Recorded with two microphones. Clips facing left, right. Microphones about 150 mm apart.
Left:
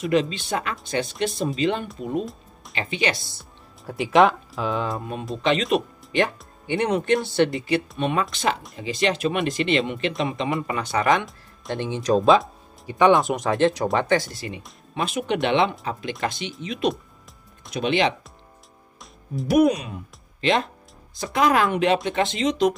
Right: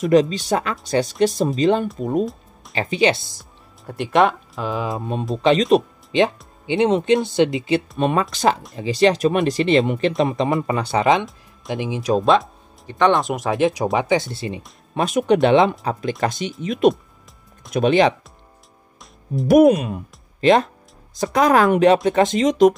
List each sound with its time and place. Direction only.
0.1 s speech: 40° right (ahead or behind)
3.8 s speech: centre (ahead or behind)
4.9 s speech: 25° right (ahead or behind)
6.1 s speech: 20° right (ahead or behind)
8.0 s speech: 40° right (ahead or behind); by 11.2 s 25° right (ahead or behind)
11.2 s speech: centre (ahead or behind)
14.2 s speech: 25° right (ahead or behind)
15.0 s speech: 45° right (ahead or behind)
19.4 s speech: 50° right (ahead or behind)